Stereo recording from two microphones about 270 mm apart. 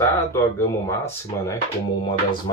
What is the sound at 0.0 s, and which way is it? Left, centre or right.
Speech, centre.